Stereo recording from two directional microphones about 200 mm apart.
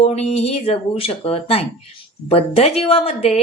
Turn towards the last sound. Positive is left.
turn(degrees=30)  # may be behind; listen again after turning